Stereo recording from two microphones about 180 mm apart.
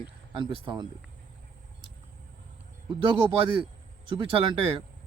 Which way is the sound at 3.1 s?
30° right (ahead or behind).